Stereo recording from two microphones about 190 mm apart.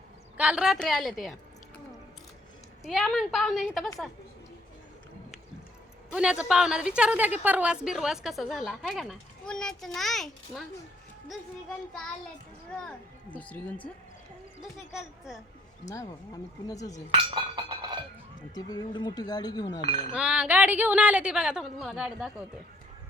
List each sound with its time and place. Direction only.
0.3 s a child's voice: 5° right (ahead or behind)
2.8 s a child's voice: centre (ahead or behind)
6.1 s a child's voice: 5° right (ahead or behind)
13.4 s a child's voice: 5° left (ahead or behind)
15.9 s speech: 20° left (ahead or behind)
17.1 s chink: 25° right (ahead or behind)
18.5 s speech: 20° left (ahead or behind)
20.1 s a child's voice: 5° right (ahead or behind)